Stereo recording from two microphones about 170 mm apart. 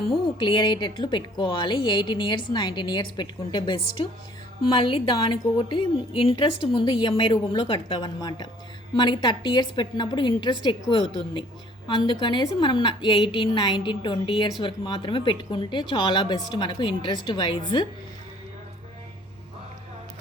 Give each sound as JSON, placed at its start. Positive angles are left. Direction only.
{"t": 0.3, "sound": "a woman's voice", "side_deg": 30}
{"t": 11.9, "sound": "a woman's voice", "side_deg": 30}